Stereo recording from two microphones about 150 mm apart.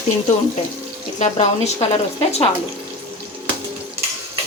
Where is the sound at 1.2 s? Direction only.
50° left (ahead or behind).